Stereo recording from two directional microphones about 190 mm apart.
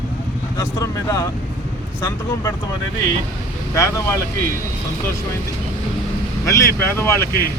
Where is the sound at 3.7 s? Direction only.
15° left (ahead or behind).